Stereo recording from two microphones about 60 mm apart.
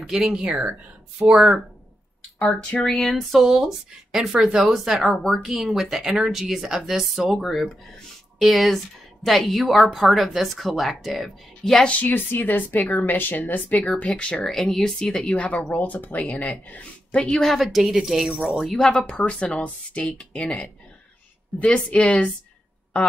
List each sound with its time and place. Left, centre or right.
0.0 s speech: centre
0.4 s speech: centre
1.2 s speech: centre
2.3 s a woman's voice: centre
2.8 s a woman's voice: centre
12.0 s a woman's voice: left; by 14.4 s centre
14.4 s a woman's voice: centre
17.4 s speech: centre
18.9 s a woman's voice: centre
21.5 s a woman's voice: centre